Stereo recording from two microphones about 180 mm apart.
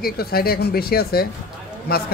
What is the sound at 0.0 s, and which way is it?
Speech, 60° left (ahead or behind).